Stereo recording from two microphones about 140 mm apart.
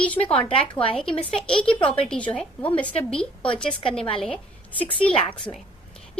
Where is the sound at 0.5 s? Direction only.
40° left (ahead or behind).